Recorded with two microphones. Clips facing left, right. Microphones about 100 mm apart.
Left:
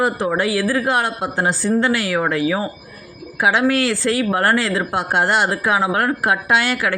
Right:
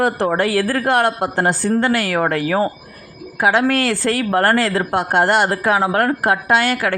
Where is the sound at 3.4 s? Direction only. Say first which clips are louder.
Right 1 dB; 45° right (ahead or behind).